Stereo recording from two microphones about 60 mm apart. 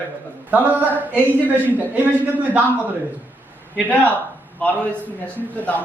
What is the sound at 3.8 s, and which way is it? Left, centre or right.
Speech, left.